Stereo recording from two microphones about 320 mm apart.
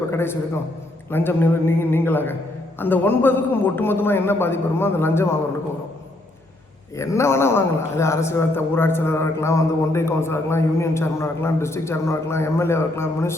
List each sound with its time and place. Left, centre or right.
0.1 s a man's voice: centre
6.9 s a man's voice: centre